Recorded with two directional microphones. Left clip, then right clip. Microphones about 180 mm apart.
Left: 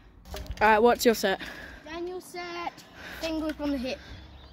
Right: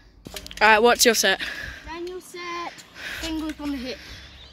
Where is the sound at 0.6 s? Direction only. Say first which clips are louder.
Right 5 dB; centre (ahead or behind).